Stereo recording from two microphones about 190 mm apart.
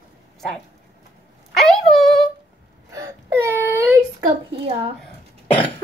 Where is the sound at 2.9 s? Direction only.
15° right (ahead or behind).